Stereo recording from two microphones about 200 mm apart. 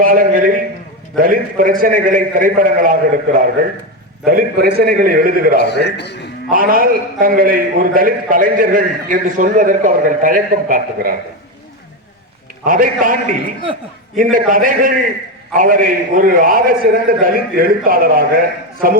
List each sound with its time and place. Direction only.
0.0 s a man's voice: 45° right (ahead or behind)
5.5 s a man's voice: 55° left (ahead or behind)
6.5 s a man's voice: 45° right (ahead or behind)
12.6 s a man's voice: 45° right (ahead or behind)